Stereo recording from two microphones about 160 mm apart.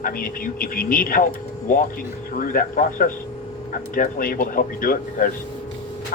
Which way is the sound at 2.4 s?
60° left (ahead or behind).